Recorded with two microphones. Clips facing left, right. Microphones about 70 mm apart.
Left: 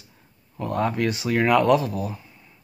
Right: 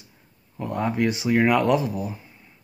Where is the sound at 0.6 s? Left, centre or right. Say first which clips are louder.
Left 1 dB; centre.